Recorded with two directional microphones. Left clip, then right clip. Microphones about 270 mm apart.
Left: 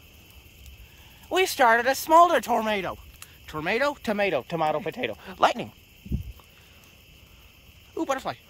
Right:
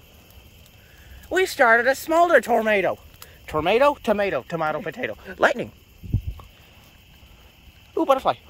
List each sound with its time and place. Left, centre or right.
1.3 s speech: centre
4.3 s speech: centre
7.9 s speech: centre